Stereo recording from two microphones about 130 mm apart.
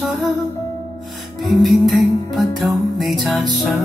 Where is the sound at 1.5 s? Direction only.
Centre (ahead or behind).